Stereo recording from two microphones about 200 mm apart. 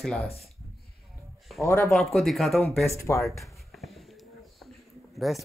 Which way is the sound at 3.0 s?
15° left (ahead or behind).